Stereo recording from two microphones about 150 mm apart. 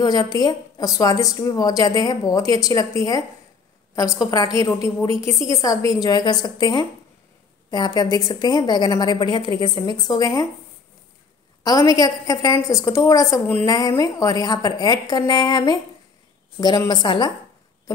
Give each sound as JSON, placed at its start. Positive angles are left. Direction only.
{"t": 0.0, "sound": "a woman's voice", "side_deg": 25}
{"t": 11.6, "sound": "a woman's voice", "side_deg": 25}